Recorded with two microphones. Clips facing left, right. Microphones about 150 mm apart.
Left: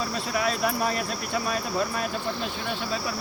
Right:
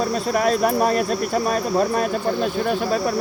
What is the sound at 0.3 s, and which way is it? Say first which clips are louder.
Speech: right 7 dB; 45° right (ahead or behind).